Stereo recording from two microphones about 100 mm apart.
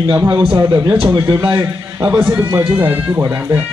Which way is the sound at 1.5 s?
30° right (ahead or behind).